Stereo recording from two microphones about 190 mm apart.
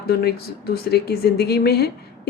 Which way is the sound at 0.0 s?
55° left (ahead or behind).